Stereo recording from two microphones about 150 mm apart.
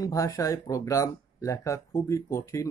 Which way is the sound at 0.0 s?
20° left (ahead or behind).